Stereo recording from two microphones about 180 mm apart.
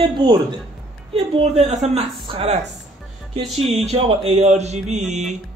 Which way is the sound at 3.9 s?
35° right (ahead or behind).